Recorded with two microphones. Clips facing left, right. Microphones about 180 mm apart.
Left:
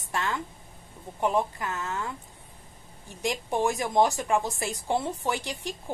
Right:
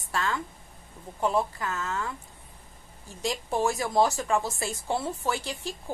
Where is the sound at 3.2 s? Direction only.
20° left (ahead or behind).